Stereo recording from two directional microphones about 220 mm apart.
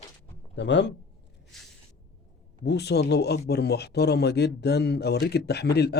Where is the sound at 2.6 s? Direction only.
50° left (ahead or behind).